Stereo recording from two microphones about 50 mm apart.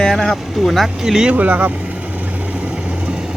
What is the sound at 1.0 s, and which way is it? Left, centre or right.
Speech, centre.